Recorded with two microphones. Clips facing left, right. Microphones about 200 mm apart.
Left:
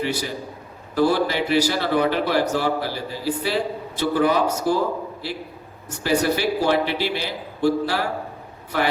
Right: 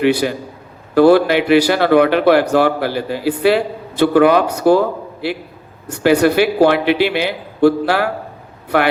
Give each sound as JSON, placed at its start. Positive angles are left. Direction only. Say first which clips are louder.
{"t": 0.0, "sound": "a man's voice", "louder": "right 10 dB", "side_deg": -65}